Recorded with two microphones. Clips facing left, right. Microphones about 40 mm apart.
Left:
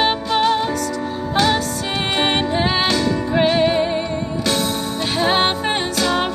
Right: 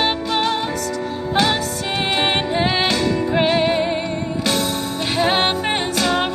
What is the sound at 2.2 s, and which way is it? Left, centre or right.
Music, centre.